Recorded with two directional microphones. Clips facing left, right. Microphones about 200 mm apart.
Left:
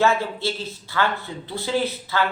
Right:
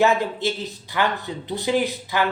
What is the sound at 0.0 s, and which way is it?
Speech, 15° right (ahead or behind).